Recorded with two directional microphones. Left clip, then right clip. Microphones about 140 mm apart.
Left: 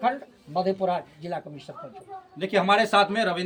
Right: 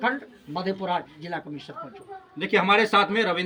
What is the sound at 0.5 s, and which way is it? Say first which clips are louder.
Speech: left 2 dB; 35° left (ahead or behind).